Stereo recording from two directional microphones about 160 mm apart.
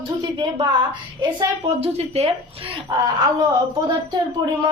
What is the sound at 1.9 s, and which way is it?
Speech, 40° right (ahead or behind).